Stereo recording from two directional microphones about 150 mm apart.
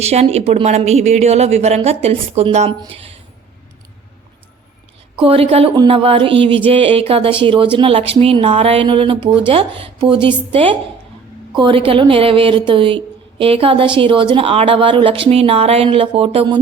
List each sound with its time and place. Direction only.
0.0 s a woman's voice: 45° right (ahead or behind)
5.2 s speech: 40° right (ahead or behind)